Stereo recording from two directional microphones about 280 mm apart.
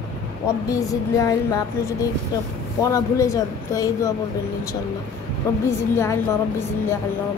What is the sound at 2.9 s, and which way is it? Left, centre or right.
Speech, centre.